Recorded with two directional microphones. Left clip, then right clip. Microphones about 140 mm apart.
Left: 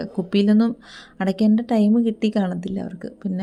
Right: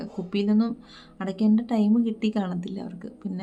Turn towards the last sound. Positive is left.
turn(degrees=35)  # may be behind; listen again after turning